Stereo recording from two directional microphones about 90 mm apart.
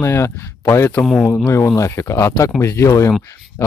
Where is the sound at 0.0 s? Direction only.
30° left (ahead or behind).